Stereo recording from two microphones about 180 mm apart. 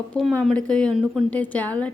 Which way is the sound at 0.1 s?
5° left (ahead or behind).